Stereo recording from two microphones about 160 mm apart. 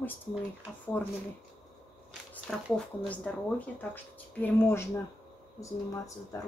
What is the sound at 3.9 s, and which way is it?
Speech, 10° left (ahead or behind).